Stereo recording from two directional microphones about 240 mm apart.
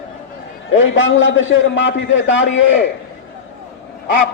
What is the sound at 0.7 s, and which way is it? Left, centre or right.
A man's voice, left.